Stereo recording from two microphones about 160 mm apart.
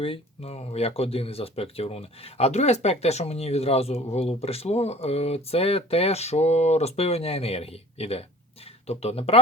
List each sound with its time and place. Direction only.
0.0 s speech: 35° left (ahead or behind)